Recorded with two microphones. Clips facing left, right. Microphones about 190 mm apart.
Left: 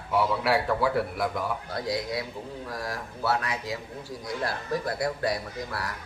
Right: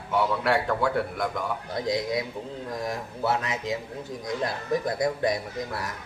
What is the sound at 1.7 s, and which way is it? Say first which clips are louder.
A man's voice: right 5 dB; 20° right (ahead or behind).